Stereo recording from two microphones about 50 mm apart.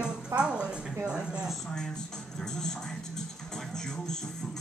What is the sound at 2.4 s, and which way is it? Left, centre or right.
Speech, centre.